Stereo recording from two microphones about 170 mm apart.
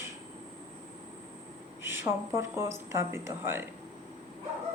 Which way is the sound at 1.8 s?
15° right (ahead or behind).